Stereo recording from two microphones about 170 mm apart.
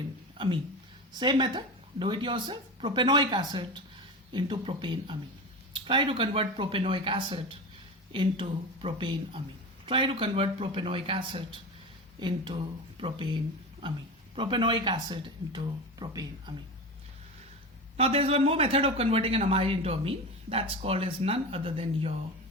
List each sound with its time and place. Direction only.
0.3 s a sound: 30° right (ahead or behind)
1.2 s speech: 25° right (ahead or behind)
17.9 s speech: 35° right (ahead or behind)